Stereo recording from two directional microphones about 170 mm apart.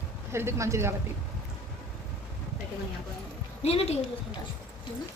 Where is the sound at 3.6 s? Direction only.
35° left (ahead or behind).